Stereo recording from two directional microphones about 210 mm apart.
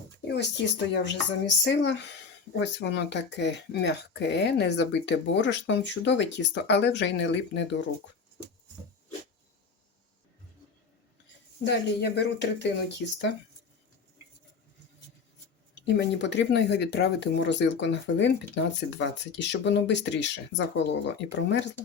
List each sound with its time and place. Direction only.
0.3 s speech: 55° left (ahead or behind)
11.6 s speech: 55° left (ahead or behind)
16.0 s speech: 55° left (ahead or behind)